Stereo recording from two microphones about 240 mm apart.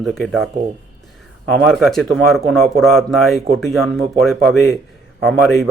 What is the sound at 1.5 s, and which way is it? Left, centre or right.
Speech, centre.